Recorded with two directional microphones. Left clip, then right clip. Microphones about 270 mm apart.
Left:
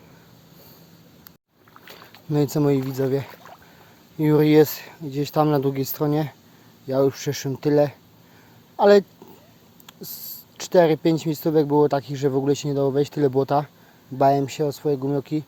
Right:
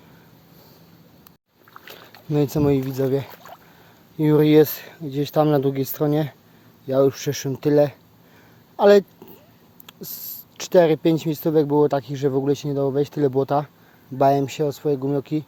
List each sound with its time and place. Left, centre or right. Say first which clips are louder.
1.8 s rowboat: even; centre
4.2 s speech: right 1 dB; centre